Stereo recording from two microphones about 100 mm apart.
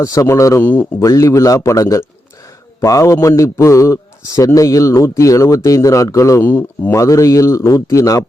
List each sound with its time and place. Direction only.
0.0 s a man's voice: 35° left (ahead or behind)
0.6 s speech: 20° left (ahead or behind)
1.0 s a man's voice: 35° left (ahead or behind)
6.4 s speech: 20° left (ahead or behind)
6.9 s a man's voice: 30° left (ahead or behind)